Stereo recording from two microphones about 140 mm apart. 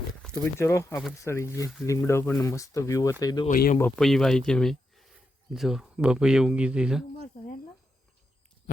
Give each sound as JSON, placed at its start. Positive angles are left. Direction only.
{"t": 0.4, "sound": "speech", "side_deg": 20}
{"t": 3.5, "sound": "speech", "side_deg": 85}
{"t": 3.9, "sound": "speech", "side_deg": 5}
{"t": 7.3, "sound": "speech", "side_deg": 80}